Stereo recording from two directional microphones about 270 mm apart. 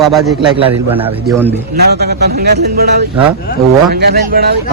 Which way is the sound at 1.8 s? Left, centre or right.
Right.